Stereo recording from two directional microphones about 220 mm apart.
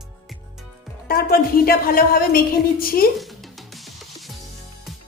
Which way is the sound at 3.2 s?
Centre (ahead or behind).